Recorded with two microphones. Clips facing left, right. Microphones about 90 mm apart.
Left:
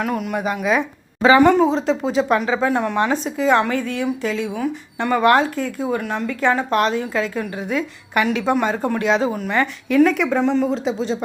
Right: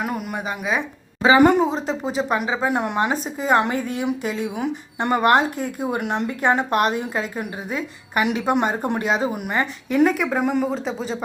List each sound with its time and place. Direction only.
0.0 s speech: 5° right (ahead or behind)
2.6 s a woman's voice: 15° right (ahead or behind)
3.2 s a woman's voice: 40° right (ahead or behind)
3.5 s a woman's voice: 15° right (ahead or behind)